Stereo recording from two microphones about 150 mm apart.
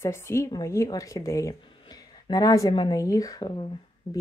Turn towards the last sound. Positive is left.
turn(degrees=30)  # may be behind; listen again after turning